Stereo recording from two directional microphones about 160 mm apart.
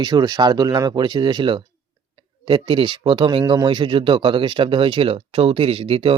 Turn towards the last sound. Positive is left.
turn(degrees=-35)  # may be behind; listen again after turning